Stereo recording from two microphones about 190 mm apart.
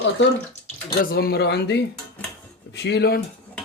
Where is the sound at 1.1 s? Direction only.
55° left (ahead or behind).